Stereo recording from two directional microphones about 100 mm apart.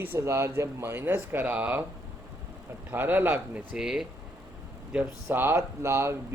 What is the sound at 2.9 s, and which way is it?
Speech, 20° right (ahead or behind).